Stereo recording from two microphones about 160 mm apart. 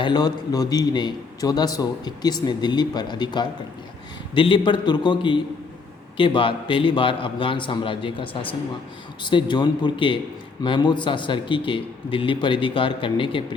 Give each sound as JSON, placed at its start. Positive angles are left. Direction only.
{"t": 0.0, "sound": "a man's voice", "side_deg": 25}